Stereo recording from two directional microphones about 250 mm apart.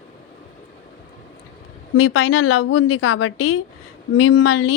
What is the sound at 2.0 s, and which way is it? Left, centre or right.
A woman's voice, left.